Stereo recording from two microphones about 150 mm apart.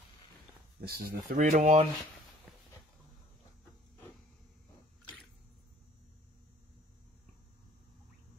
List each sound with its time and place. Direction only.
0.7 s speech: 90° right
1.4 s speech: 55° right (ahead or behind)